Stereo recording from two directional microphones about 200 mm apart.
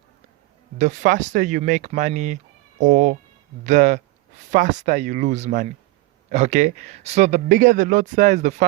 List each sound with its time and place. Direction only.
0.8 s speech: 35° right (ahead or behind)